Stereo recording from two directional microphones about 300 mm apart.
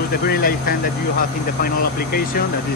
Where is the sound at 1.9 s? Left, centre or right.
Left.